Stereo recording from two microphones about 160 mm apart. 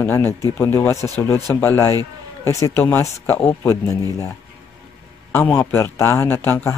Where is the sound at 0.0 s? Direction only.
15° left (ahead or behind).